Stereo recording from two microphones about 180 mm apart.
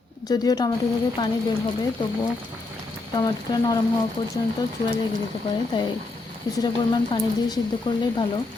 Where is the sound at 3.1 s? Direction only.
20° left (ahead or behind).